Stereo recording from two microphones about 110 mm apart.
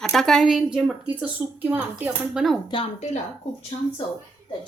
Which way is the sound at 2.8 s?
70° left (ahead or behind).